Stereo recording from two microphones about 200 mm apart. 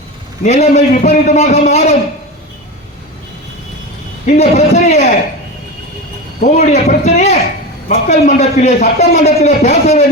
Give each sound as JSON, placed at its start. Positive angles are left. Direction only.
{"t": 0.4, "sound": "a man's voice", "side_deg": 35}
{"t": 4.3, "sound": "a man's voice", "side_deg": 35}
{"t": 6.5, "sound": "a man's voice", "side_deg": 35}